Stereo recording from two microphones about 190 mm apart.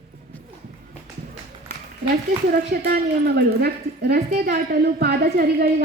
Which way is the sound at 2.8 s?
55° right (ahead or behind).